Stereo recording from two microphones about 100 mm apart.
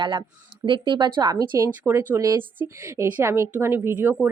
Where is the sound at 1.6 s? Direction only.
30° right (ahead or behind).